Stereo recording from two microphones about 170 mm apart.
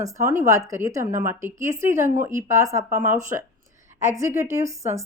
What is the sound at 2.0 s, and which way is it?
Speech, 50° right (ahead or behind).